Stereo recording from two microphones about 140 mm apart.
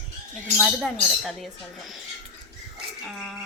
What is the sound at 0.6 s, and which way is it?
Speech, centre (ahead or behind).